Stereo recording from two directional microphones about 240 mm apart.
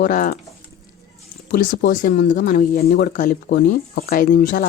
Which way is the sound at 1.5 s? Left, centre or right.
Left.